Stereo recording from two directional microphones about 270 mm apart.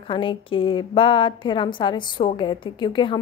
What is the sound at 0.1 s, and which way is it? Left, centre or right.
A woman's voice, centre.